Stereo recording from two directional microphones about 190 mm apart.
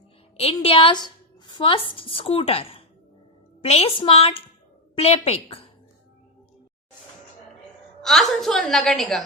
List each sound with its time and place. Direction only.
0.3 s a woman's voice: 30° left (ahead or behind)
8.0 s a woman's voice: centre (ahead or behind)